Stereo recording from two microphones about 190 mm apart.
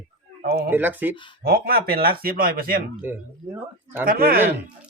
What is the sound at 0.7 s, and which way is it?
Speech, 10° right (ahead or behind).